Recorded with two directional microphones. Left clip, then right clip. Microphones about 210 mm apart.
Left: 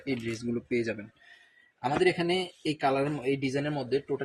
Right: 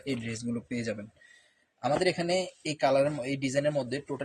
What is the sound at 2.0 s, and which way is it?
Speech, 45° right (ahead or behind).